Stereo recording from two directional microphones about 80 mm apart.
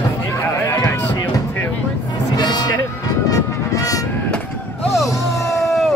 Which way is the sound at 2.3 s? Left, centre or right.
Left.